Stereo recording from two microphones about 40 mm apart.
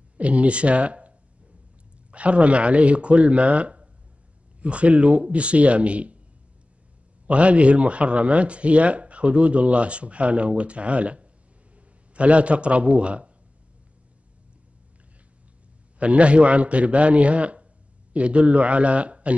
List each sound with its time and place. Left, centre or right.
0.2 s speech: right
7.2 s speech: right
16.0 s speech: right